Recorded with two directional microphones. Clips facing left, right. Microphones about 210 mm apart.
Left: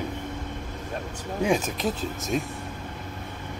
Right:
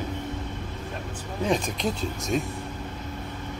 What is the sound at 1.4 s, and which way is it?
A man's voice, 5° left (ahead or behind).